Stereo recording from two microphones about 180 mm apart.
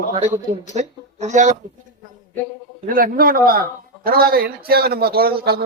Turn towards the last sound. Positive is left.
turn(degrees=-60)  # may be behind; listen again after turning